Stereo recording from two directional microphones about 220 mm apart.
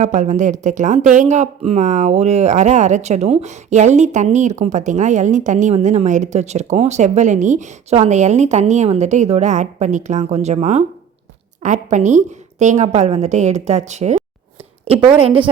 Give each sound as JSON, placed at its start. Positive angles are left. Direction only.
{"t": 0.0, "sound": "speech", "side_deg": -35}
{"t": 14.9, "sound": "a woman's voice", "side_deg": -20}